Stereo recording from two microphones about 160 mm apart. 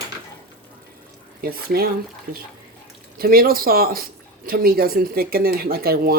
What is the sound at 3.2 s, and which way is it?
Speech, 65° right (ahead or behind).